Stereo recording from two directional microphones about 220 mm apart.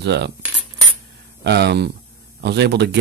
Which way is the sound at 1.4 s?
50° right (ahead or behind).